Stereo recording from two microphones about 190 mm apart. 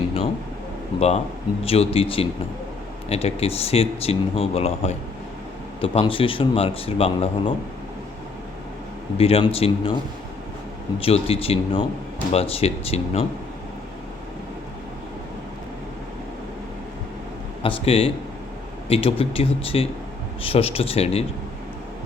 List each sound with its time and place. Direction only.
0.9 s speech: 35° left (ahead or behind)
9.1 s speech: 30° left (ahead or behind)
11.0 s speech: 30° left (ahead or behind)
17.6 s speech: 30° left (ahead or behind)